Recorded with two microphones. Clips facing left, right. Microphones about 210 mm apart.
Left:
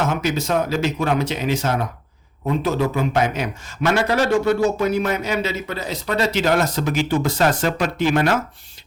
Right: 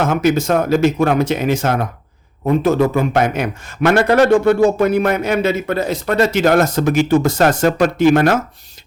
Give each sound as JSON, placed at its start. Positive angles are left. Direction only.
{"t": 0.0, "sound": "a man's voice", "side_deg": -50}